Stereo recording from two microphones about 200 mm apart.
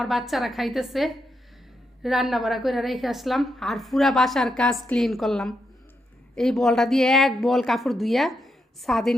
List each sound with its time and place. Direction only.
0.0 s a woman's voice: centre (ahead or behind)